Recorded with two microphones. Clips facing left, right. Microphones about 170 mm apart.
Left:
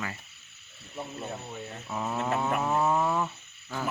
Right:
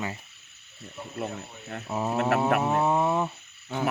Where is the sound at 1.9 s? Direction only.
30° right (ahead or behind).